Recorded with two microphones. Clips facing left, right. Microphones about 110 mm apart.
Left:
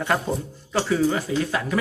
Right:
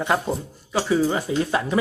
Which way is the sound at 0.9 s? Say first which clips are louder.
Right 1 dB; 20° right (ahead or behind).